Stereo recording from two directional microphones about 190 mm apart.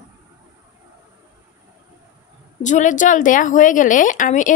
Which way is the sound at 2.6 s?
40° left (ahead or behind).